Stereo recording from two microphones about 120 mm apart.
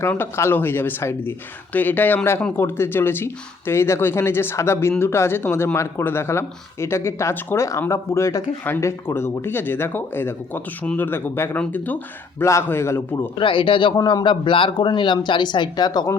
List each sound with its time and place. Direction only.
0.0 s speech: 20° left (ahead or behind)
13.4 s a man's voice: 45° left (ahead or behind)
13.9 s speech: 30° left (ahead or behind)